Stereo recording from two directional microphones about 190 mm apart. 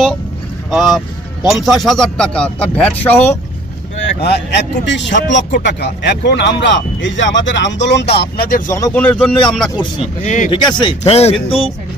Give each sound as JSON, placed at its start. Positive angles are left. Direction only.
{"t": 0.7, "sound": "speech", "side_deg": 0}
{"t": 4.2, "sound": "a man's voice", "side_deg": 60}
{"t": 8.7, "sound": "speech", "side_deg": 15}
{"t": 10.2, "sound": "speech", "side_deg": 40}
{"t": 10.5, "sound": "speech", "side_deg": 25}